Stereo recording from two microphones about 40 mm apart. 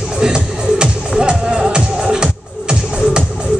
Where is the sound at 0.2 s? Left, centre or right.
Right.